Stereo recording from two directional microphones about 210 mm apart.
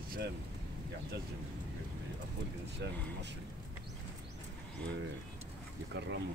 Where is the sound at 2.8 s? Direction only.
55° right (ahead or behind).